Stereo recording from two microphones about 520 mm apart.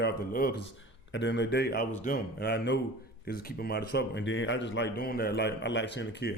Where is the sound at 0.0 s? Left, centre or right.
Centre.